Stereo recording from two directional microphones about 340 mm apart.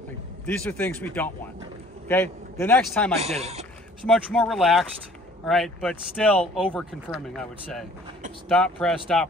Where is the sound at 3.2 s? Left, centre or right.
Centre.